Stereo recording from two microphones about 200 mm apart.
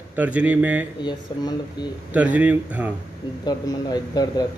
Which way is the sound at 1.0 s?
20° left (ahead or behind).